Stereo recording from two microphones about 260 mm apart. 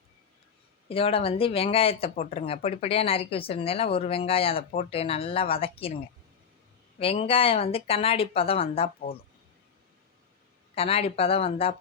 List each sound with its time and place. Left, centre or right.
0.9 s speech: left
7.0 s speech: left
10.8 s speech: left